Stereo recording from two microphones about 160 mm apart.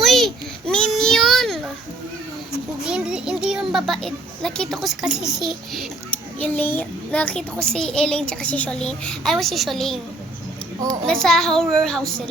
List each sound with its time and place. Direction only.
0.0 s a sound: centre (ahead or behind)
2.8 s a child's voice: 5° right (ahead or behind)
6.4 s a child's voice: 10° left (ahead or behind)
10.8 s a child's voice: 20° right (ahead or behind)
11.0 s a child's voice: 5° left (ahead or behind)